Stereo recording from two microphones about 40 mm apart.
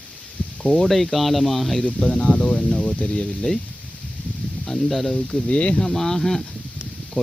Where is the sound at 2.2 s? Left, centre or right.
Left.